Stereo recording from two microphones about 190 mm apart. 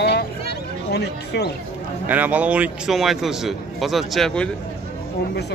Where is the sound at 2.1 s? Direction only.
10° right (ahead or behind).